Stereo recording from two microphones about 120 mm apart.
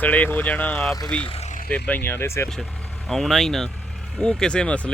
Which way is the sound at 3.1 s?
Centre (ahead or behind).